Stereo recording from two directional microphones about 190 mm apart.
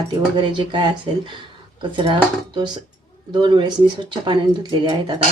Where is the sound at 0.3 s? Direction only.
25° right (ahead or behind).